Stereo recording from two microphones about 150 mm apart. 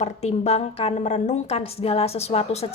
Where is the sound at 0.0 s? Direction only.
45° left (ahead or behind).